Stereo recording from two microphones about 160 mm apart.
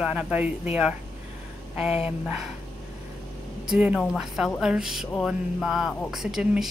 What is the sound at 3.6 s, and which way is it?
Speech, 5° right (ahead or behind).